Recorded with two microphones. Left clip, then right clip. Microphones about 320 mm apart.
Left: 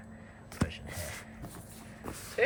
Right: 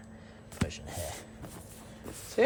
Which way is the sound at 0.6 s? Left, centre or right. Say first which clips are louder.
Right 1 dB; centre.